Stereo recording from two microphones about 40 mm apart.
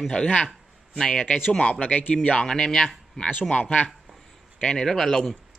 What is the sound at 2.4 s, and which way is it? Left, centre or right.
Speech, centre.